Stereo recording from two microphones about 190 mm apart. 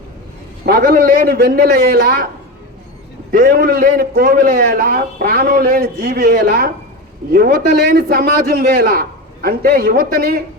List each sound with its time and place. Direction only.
0.6 s a man's voice: 55° right (ahead or behind)
3.3 s a man's voice: 50° right (ahead or behind)